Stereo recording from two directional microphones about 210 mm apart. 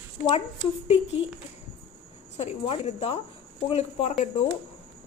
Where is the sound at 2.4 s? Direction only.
30° left (ahead or behind).